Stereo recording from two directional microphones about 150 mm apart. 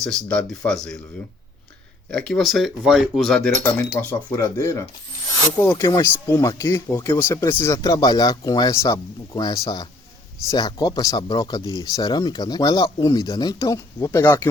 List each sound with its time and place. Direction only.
0.0 s speech: 5° left (ahead or behind)
2.0 s speech: 5° left (ahead or behind)